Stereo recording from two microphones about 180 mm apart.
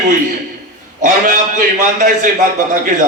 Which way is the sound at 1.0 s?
45° right (ahead or behind).